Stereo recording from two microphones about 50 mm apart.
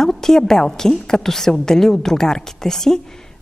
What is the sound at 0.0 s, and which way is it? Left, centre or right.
A woman's voice, centre.